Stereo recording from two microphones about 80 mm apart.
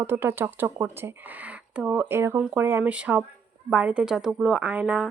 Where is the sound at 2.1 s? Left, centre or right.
Right.